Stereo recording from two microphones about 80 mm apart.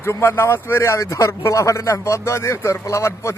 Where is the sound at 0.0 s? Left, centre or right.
Left.